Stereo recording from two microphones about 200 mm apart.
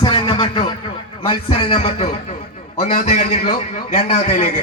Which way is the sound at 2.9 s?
40° left (ahead or behind).